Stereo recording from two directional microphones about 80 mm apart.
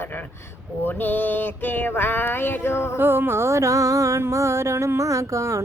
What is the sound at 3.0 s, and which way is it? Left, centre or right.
Music, right.